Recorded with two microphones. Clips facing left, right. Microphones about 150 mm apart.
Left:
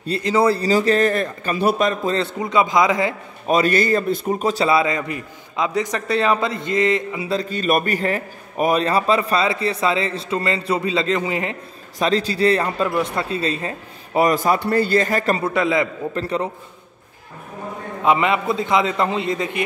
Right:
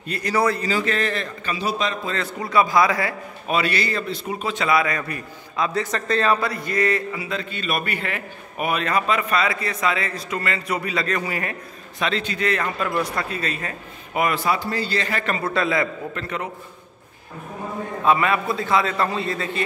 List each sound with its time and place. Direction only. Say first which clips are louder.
0.0 s a man's voice: left 4 dB; 25° left (ahead or behind); by 2.1 s 50° left (ahead or behind)
2.1 s a man's voice: left 2 dB; 25° left (ahead or behind)
3.4 s a man's voice: left 6 dB; 40° left (ahead or behind); by 7.2 s 20° left (ahead or behind)
7.2 s a man's voice: left 7 dB; 40° left (ahead or behind); by 11.5 s 20° left (ahead or behind)
12.0 s a man's voice: left 6 dB; 35° left (ahead or behind)
14.6 s a man's voice: left 8 dB; 55° left (ahead or behind); by 15.4 s 40° left (ahead or behind)
15.4 s a man's voice: left 3 dB; 15° left (ahead or behind)
16.2 s a man's voice: left 8 dB; 30° left (ahead or behind)
18.0 s a man's voice: left 2 dB; 20° left (ahead or behind)